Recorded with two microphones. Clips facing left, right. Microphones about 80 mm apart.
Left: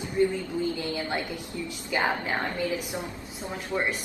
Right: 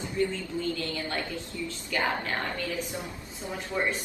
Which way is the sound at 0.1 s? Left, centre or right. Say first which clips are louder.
Left 5 dB; centre.